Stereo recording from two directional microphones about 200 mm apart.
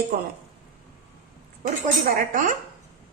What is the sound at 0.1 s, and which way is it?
Speech, 50° right (ahead or behind).